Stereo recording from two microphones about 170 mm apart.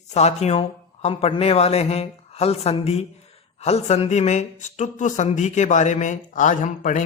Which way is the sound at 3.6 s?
40° left (ahead or behind).